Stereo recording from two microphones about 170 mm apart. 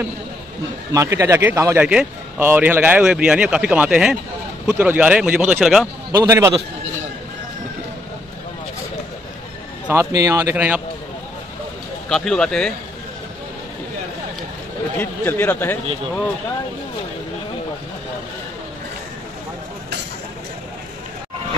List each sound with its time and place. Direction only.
0.9 s a man's voice: 15° right (ahead or behind)
6.1 s a man's voice: 15° right (ahead or behind)
9.8 s a man's voice: 15° right (ahead or behind)
12.1 s speech: 5° left (ahead or behind)
15.0 s speech: 10° left (ahead or behind)